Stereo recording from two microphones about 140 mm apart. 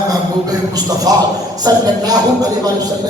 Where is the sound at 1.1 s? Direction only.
25° right (ahead or behind).